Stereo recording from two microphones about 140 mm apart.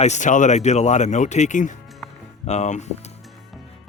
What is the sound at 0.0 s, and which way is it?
Speech, 60° left (ahead or behind).